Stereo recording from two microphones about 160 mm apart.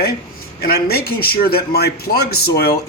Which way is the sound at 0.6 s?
70° left (ahead or behind).